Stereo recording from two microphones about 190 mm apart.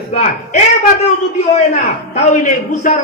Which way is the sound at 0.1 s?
40° left (ahead or behind).